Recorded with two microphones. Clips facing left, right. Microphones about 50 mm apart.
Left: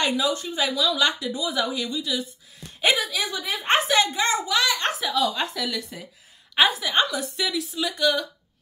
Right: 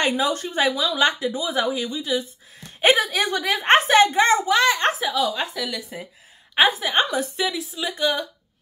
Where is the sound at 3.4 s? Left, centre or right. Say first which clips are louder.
Right 5 dB; right.